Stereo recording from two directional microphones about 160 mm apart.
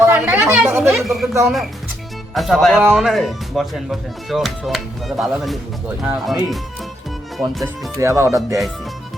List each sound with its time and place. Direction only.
0.0 s a woman's voice: 15° right (ahead or behind)
1.0 s speech: centre (ahead or behind)
1.3 s speech: 20° right (ahead or behind)
2.3 s speech: centre (ahead or behind)
7.6 s speech: 20° right (ahead or behind)